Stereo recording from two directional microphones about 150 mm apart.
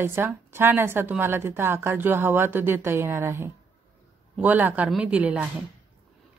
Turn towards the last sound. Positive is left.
turn(degrees=-10)  # may be behind; listen again after turning